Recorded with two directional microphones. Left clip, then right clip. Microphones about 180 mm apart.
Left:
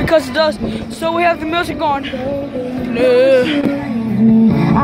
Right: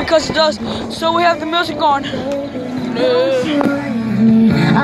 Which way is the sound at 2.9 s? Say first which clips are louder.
Left 4 dB; 55° left (ahead or behind).